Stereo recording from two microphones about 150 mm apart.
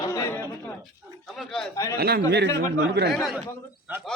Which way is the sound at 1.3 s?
Centre (ahead or behind).